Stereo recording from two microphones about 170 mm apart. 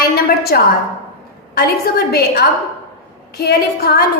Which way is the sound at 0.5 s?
65° left (ahead or behind).